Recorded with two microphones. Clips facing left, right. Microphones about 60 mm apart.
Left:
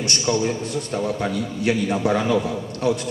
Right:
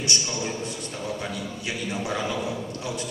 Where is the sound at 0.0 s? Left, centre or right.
Left.